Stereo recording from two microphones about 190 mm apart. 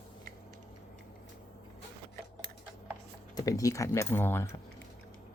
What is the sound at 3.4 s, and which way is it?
Speech, 20° left (ahead or behind).